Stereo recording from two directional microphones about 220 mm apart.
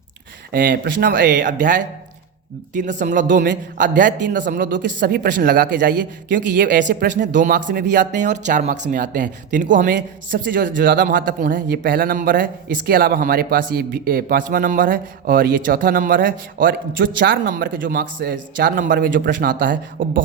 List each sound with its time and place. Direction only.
0.5 s speech: 40° right (ahead or behind)
6.6 s speech: 50° right (ahead or behind)
7.3 s speech: 35° right (ahead or behind)